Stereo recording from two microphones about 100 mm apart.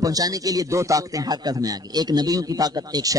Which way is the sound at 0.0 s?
35° right (ahead or behind).